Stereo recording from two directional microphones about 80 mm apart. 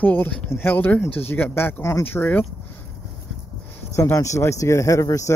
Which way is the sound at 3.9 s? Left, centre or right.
Left.